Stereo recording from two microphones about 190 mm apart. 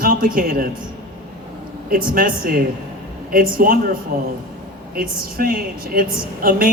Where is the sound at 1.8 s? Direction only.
50° right (ahead or behind).